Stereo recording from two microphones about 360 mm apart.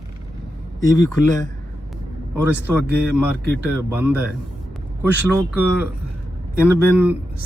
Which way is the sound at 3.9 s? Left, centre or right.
Centre.